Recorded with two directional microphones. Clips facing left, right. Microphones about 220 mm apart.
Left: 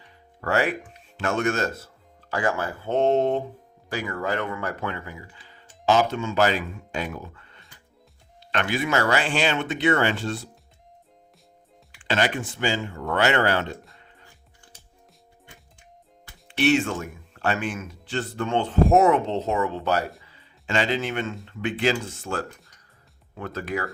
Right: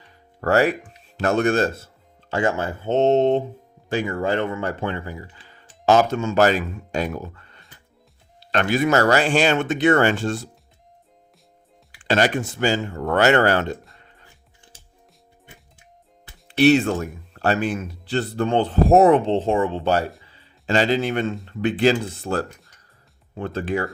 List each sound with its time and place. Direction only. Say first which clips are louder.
0.4 s speech: right 6 dB; 40° right (ahead or behind)
11.9 s speech: right 5 dB; 40° right (ahead or behind)
16.5 s speech: right 5 dB; 35° right (ahead or behind)
20.2 s music: right 6 dB; 30° right (ahead or behind)
21.4 s speech: right 6 dB; 40° right (ahead or behind)